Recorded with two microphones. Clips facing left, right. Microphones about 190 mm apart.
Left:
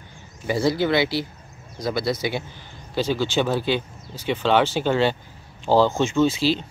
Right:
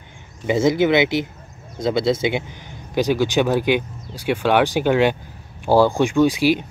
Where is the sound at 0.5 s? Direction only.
20° right (ahead or behind).